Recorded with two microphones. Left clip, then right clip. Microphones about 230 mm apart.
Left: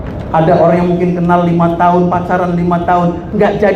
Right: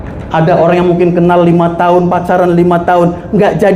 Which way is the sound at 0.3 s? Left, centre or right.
Right.